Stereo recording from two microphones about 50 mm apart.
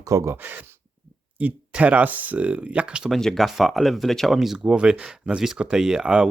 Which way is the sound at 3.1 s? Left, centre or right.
Centre.